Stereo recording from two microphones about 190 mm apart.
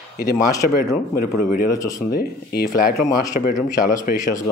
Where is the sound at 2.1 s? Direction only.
55° left (ahead or behind).